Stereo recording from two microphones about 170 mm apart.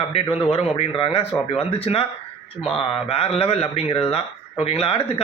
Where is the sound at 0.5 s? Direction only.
35° left (ahead or behind).